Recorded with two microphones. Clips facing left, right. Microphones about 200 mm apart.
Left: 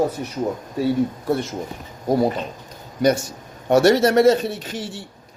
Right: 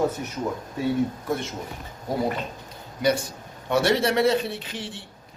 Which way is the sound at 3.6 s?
45° left (ahead or behind).